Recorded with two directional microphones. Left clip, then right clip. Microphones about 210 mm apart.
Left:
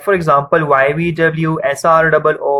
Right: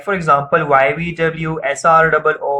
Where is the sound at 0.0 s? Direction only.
45° left (ahead or behind).